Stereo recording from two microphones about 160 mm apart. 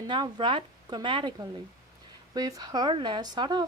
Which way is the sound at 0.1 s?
30° right (ahead or behind).